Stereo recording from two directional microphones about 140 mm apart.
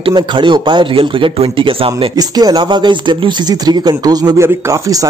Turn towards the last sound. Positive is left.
turn(degrees=-25)  # may be behind; listen again after turning